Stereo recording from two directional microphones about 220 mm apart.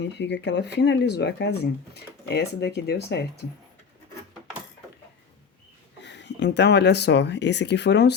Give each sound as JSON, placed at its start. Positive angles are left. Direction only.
{"t": 0.0, "sound": "speech", "side_deg": 50}
{"t": 6.0, "sound": "speech", "side_deg": 50}